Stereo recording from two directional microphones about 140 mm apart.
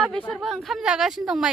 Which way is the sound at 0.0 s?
5° left (ahead or behind).